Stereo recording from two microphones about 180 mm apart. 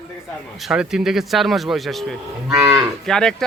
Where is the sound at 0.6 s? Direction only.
5° right (ahead or behind).